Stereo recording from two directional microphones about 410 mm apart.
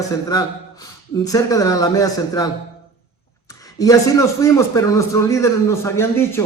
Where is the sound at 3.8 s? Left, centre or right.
Centre.